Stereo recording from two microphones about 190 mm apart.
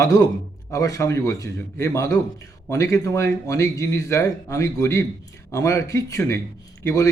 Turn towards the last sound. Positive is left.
turn(degrees=15)  # may be behind; listen again after turning